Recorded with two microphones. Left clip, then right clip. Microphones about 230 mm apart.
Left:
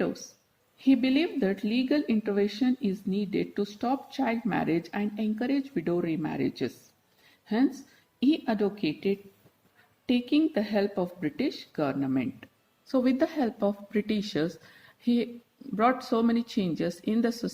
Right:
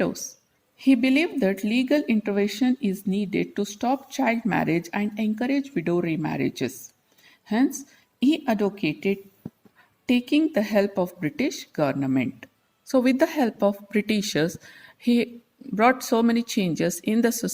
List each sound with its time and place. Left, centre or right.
0.8 s a woman's voice: right